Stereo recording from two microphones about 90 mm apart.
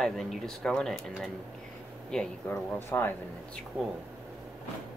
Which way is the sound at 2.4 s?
20° left (ahead or behind).